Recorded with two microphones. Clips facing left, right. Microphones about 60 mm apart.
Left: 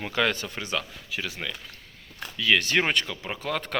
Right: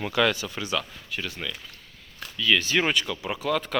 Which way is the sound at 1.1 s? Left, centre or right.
Left.